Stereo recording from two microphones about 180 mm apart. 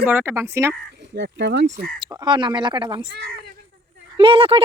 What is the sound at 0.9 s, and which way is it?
Speech, 75° right (ahead or behind).